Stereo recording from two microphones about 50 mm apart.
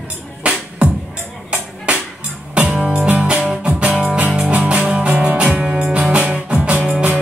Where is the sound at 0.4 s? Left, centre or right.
Right.